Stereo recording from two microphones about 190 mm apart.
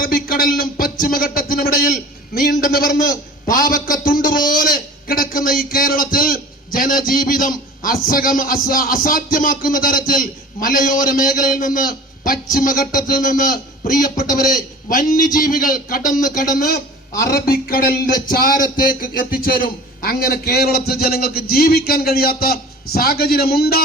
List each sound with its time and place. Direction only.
0.0 s a man's voice: 50° left (ahead or behind)